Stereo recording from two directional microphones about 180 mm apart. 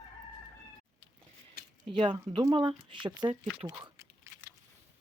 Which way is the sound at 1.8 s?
25° right (ahead or behind).